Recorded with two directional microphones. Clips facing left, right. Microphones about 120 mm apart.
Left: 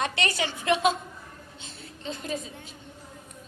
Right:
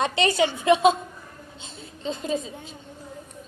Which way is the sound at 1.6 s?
25° right (ahead or behind).